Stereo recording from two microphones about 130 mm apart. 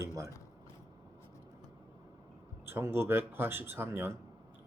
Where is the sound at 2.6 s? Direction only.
20° right (ahead or behind).